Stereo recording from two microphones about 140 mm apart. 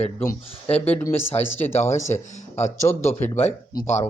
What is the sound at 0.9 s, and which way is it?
Speech, 15° left (ahead or behind).